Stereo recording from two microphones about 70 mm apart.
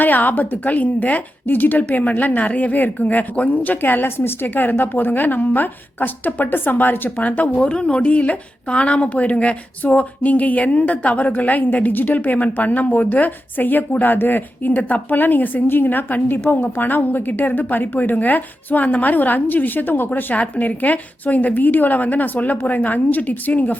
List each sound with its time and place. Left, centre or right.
0.0 s a woman's voice: left